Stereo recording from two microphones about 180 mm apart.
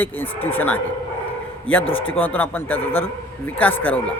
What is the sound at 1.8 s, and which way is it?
Speech, 90° left.